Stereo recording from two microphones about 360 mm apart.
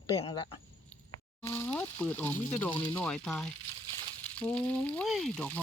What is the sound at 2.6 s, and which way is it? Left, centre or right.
Speech, centre.